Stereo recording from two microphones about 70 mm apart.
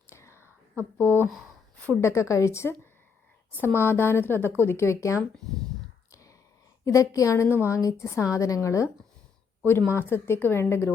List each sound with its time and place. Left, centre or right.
0.1 s whispering: left
1.0 s speech: left
3.8 s a woman's voice: left
6.1 s whispering: left
6.8 s a woman's voice: left
7.3 s speech: left
7.8 s a woman's voice: left
9.6 s speech: left